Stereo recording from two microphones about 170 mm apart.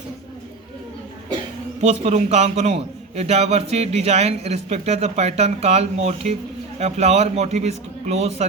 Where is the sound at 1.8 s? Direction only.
40° right (ahead or behind).